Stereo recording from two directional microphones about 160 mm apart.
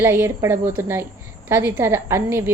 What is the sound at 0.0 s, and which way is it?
A woman's voice, 15° right (ahead or behind).